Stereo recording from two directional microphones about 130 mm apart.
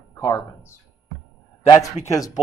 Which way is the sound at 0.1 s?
20° left (ahead or behind).